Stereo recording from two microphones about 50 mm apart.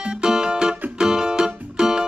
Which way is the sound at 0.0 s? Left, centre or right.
Centre.